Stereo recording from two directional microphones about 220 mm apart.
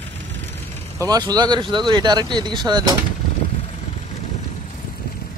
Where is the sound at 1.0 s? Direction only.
15° right (ahead or behind).